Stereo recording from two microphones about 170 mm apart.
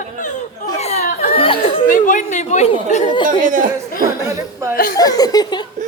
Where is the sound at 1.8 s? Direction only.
50° left (ahead or behind).